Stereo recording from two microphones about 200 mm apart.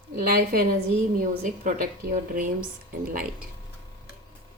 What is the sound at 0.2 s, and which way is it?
A woman's voice, 45° right (ahead or behind).